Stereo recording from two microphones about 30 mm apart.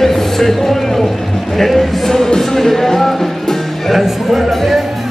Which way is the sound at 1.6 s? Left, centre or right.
Centre.